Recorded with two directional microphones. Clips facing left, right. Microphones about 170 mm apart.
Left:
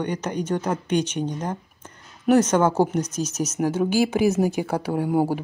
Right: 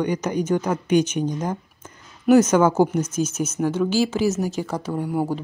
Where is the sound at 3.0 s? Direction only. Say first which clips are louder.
Right 2 dB; 35° left (ahead or behind); by 4.1 s 55° left (ahead or behind).